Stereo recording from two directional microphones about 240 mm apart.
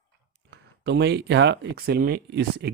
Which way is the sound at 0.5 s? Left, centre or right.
Right.